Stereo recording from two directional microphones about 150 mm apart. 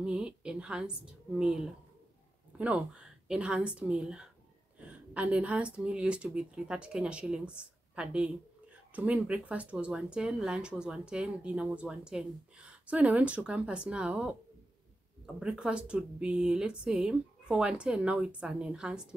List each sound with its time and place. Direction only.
0.0 s a woman's voice: 5° right (ahead or behind)
15.3 s a woman's voice: 5° right (ahead or behind)